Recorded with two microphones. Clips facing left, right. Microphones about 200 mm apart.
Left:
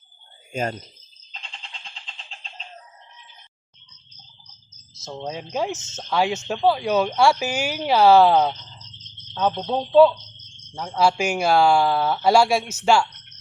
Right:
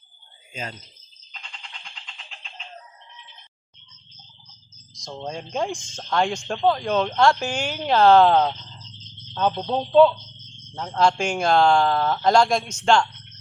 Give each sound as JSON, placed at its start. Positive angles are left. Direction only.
{"t": 0.5, "sound": "speech", "side_deg": 50}
{"t": 1.8, "sound": "a sound", "side_deg": 30}
{"t": 4.7, "sound": "speech", "side_deg": 5}